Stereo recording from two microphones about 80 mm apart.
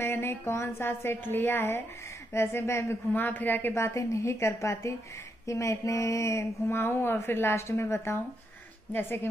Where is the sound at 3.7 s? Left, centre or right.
Left.